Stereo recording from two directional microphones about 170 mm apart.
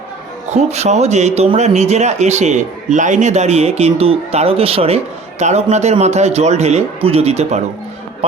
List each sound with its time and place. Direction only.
0.5 s a man's voice: 40° right (ahead or behind)